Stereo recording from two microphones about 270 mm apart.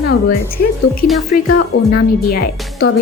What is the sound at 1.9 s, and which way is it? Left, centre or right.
Speech, left.